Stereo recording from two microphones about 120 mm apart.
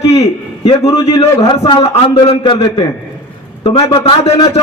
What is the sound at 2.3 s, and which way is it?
A man's voice, 55° left (ahead or behind).